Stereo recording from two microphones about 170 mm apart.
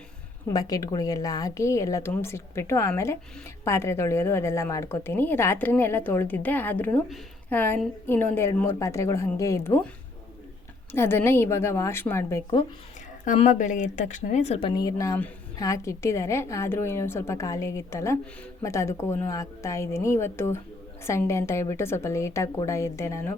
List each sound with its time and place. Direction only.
0.4 s a woman's voice: 20° left (ahead or behind)
10.9 s a woman's voice: 15° left (ahead or behind)
13.2 s a woman's voice: 45° left (ahead or behind)
14.7 s a woman's voice: 20° left (ahead or behind)